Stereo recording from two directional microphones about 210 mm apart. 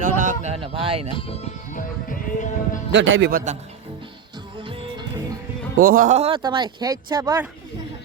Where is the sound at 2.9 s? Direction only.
65° right (ahead or behind).